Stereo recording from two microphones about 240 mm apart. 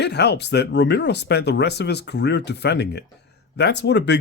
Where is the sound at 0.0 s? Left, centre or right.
Left.